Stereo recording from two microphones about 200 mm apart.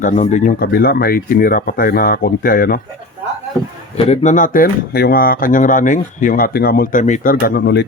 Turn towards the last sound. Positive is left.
turn(degrees=55)  # may be behind; listen again after turning